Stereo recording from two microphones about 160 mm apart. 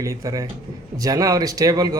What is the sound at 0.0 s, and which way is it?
A man's voice, 20° right (ahead or behind).